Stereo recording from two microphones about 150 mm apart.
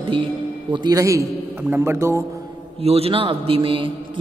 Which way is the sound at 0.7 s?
30° right (ahead or behind).